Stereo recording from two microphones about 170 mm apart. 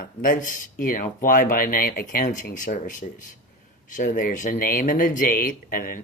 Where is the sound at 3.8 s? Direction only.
50° left (ahead or behind).